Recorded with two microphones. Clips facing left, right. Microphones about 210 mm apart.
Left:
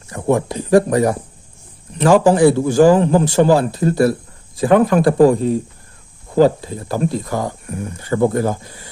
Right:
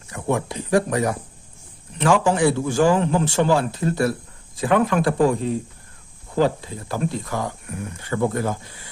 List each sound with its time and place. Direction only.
0.1 s speech: 35° left (ahead or behind)